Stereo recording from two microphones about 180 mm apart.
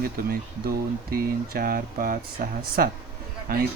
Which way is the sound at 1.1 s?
55° right (ahead or behind).